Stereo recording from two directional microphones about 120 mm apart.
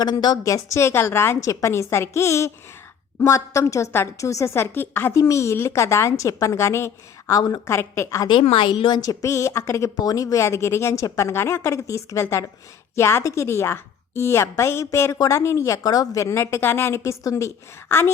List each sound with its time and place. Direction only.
0.0 s a woman's voice: 35° left (ahead or behind)
8.3 s a woman's voice: 50° left (ahead or behind)
9.2 s a woman's voice: 25° left (ahead or behind)